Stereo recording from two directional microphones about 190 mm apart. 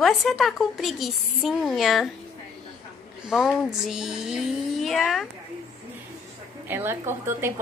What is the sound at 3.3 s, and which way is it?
A woman's voice, 5° right (ahead or behind).